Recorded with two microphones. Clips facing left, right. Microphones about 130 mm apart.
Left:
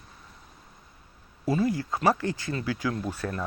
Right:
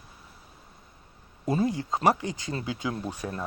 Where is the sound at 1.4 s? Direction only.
20° right (ahead or behind).